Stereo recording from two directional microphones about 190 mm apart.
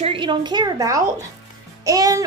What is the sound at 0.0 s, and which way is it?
A woman's voice, 25° right (ahead or behind).